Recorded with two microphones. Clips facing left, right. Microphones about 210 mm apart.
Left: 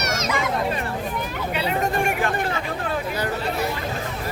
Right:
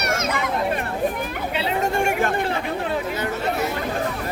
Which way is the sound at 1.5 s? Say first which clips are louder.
Even; 25° right (ahead or behind).